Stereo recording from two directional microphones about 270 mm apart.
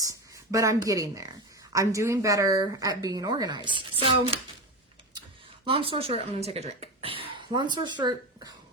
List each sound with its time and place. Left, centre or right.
0.0 s speech: centre
5.6 s speech: centre